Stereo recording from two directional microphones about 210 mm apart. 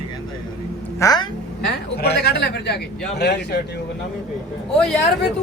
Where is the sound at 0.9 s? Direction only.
15° left (ahead or behind).